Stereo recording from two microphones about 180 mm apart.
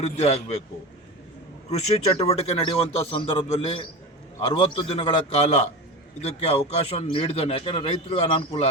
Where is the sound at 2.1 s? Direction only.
35° left (ahead or behind).